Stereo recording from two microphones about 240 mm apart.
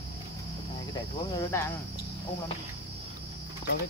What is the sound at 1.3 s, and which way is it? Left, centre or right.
Speech, centre.